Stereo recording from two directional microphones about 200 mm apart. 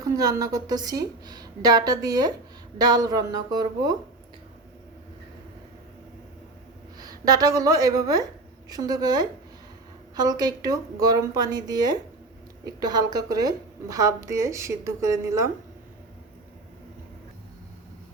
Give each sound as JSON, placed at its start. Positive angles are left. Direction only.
{"t": 0.0, "sound": "a woman's voice", "side_deg": -15}
{"t": 7.0, "sound": "a woman's voice", "side_deg": -20}